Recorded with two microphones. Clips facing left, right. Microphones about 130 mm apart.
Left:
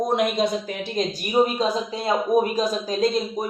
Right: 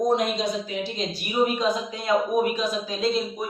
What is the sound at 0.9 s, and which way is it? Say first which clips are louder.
A man's voice: left 5 dB; 35° left (ahead or behind).